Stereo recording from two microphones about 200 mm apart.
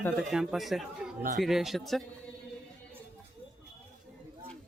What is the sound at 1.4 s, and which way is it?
Speech, centre (ahead or behind).